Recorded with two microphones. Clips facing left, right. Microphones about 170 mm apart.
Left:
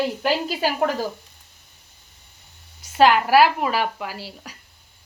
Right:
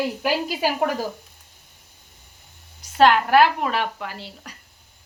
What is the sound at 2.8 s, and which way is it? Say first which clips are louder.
A woman's voice: even; centre (ahead or behind).